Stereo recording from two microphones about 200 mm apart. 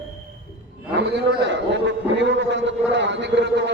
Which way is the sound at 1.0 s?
60° right (ahead or behind).